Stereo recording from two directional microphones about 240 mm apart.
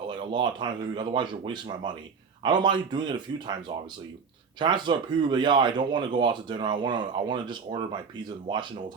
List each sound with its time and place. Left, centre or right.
0.1 s speech: centre
4.6 s speech: centre